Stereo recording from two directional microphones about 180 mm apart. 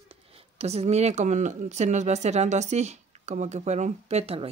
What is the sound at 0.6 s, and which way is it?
Speech, 35° right (ahead or behind).